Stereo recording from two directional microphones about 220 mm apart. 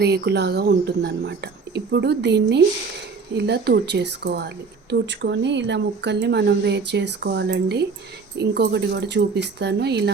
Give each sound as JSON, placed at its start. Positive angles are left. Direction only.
{"t": 0.0, "sound": "speech", "side_deg": -50}